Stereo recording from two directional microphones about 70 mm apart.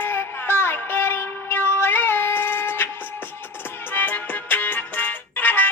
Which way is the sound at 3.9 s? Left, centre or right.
Left.